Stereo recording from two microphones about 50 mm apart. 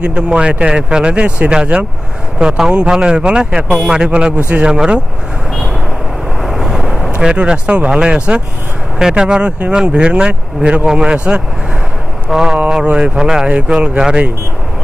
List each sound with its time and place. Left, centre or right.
0.0 s speech: right
6.4 s vehicle: centre
7.2 s speech: centre